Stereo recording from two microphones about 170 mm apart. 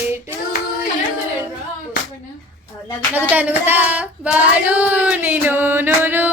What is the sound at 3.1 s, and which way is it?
Child singing, 10° right (ahead or behind).